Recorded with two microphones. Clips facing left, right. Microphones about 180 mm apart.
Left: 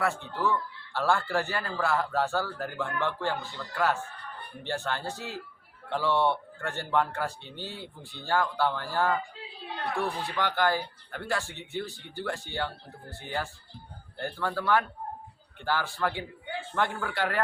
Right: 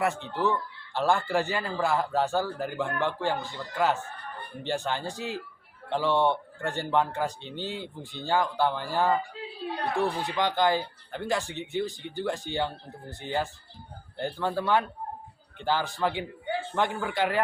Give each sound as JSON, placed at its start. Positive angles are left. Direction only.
{"t": 0.0, "sound": "a man's voice", "side_deg": -20}